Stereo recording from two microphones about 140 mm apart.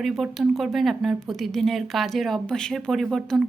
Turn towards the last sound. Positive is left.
turn(degrees=0)  # may be behind; listen again after turning